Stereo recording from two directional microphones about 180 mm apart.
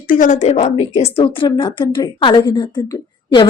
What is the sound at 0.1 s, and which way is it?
A woman's voice, 45° left (ahead or behind).